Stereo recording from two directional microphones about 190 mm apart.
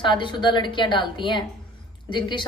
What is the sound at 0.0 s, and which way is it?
A woman's voice, 25° left (ahead or behind).